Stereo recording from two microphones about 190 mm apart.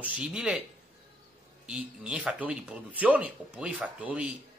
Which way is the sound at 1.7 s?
5° right (ahead or behind).